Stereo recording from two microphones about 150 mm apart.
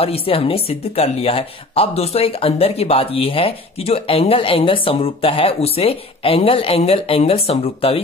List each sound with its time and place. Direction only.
0.0 s speech: 40° left (ahead or behind)